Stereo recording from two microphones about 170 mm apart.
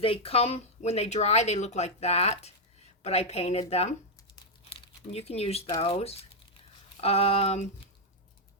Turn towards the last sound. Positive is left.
turn(degrees=35)  # may be behind; listen again after turning